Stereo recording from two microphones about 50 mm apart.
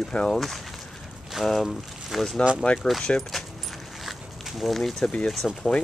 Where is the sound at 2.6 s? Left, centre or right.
Left.